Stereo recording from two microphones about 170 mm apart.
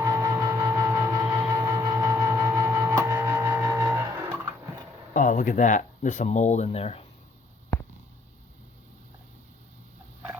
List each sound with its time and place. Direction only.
0.0 s vehicle: 20° right (ahead or behind)
5.1 s speech: 50° left (ahead or behind)